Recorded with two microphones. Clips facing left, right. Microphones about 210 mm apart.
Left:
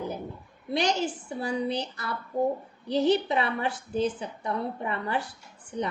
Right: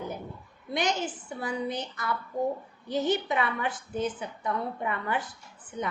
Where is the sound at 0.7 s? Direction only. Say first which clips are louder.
Left 3 dB; 30° left (ahead or behind).